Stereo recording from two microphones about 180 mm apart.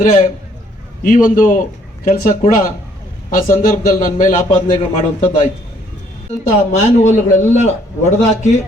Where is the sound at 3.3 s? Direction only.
45° left (ahead or behind).